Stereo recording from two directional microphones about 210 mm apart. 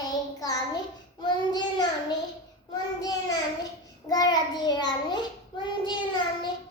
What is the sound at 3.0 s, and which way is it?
Child singing, 15° left (ahead or behind).